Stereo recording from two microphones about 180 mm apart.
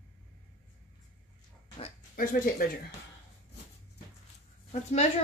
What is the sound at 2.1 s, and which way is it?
Speech, 50° left (ahead or behind).